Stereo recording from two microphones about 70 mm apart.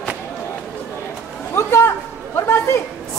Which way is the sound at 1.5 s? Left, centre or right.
Left.